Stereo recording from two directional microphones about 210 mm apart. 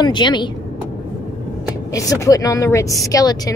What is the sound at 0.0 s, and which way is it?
Speech, 20° left (ahead or behind).